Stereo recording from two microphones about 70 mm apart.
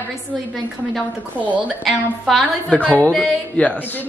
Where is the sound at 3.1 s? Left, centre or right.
Centre.